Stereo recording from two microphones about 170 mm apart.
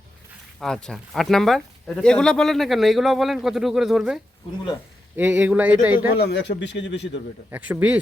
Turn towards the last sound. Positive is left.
turn(degrees=-10)  # may be behind; listen again after turning